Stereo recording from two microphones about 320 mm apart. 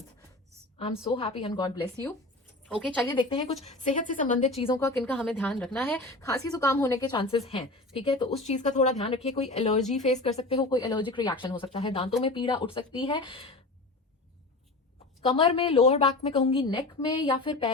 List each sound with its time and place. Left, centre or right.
1.1 s a woman's voice: centre
3.2 s a woman's voice: centre
15.3 s a woman's voice: centre